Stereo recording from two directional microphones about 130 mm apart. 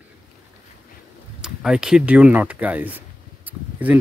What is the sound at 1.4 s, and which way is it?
Speech, 5° right (ahead or behind).